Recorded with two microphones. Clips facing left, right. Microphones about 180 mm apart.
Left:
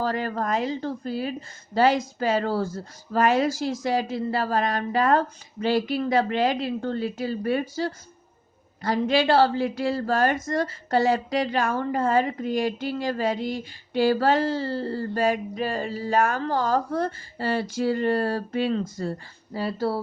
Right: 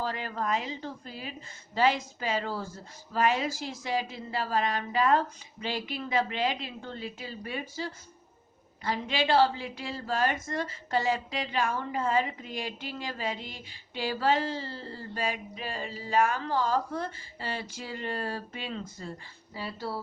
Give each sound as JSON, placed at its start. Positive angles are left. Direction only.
{"t": 0.0, "sound": "speech", "side_deg": 45}
{"t": 8.8, "sound": "speech", "side_deg": 45}
{"t": 9.3, "sound": "speech", "side_deg": 60}
{"t": 19.0, "sound": "speech", "side_deg": 55}